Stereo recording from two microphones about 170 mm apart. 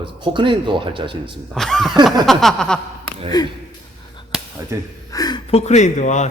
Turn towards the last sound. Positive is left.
turn(degrees=45)  # may be behind; listen again after turning